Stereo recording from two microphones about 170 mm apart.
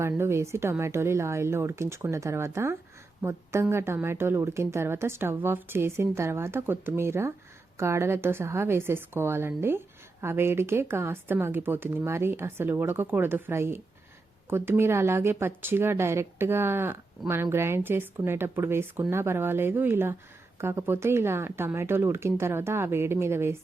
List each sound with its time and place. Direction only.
0.0 s a woman's voice: 15° right (ahead or behind)